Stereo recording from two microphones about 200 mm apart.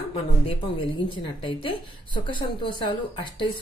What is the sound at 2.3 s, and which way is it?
Speech, 25° left (ahead or behind).